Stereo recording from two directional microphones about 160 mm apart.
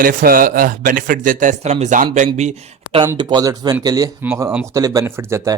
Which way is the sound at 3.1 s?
30° right (ahead or behind).